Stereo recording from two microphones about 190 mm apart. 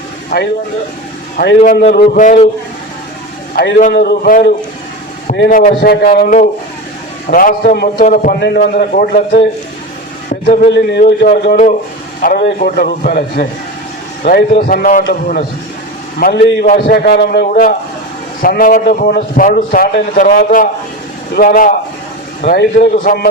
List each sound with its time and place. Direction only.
0.3 s a man's voice: 50° left (ahead or behind)
1.5 s a man's voice: 40° left (ahead or behind)
3.5 s a man's voice: 55° left (ahead or behind)
8.4 s a man's voice: 55° left (ahead or behind)
10.2 s a sound: 45° left (ahead or behind)
10.7 s speech: 60° left (ahead or behind)
12.2 s a man's voice: 50° left (ahead or behind)
16.1 s a man's voice: 60° left (ahead or behind)
22.4 s speech: 55° left (ahead or behind)